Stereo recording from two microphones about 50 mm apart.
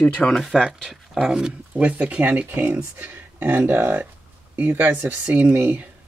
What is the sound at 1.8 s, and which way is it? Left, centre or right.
Speech, right.